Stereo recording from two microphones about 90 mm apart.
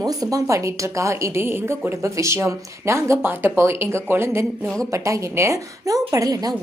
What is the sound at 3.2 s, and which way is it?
A woman's voice, 25° right (ahead or behind).